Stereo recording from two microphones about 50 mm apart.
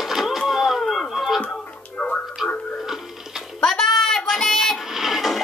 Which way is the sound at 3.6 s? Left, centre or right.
Centre.